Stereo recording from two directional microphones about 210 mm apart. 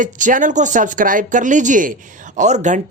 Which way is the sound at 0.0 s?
40° right (ahead or behind).